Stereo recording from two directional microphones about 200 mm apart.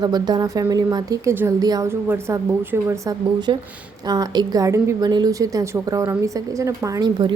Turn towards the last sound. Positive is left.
turn(degrees=-20)  # may be behind; listen again after turning